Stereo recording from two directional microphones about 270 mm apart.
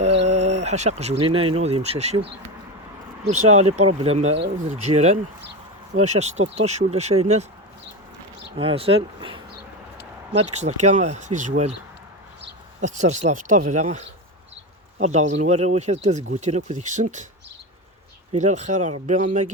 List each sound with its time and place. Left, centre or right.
0.0 s a sound: right
1.2 s speech: centre
3.2 s speech: right
8.5 s speech: right
10.5 s speech: right
12.8 s speech: right
18.3 s speech: right